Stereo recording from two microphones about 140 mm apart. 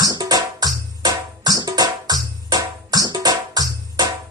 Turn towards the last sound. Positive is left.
turn(degrees=-30)  # may be behind; listen again after turning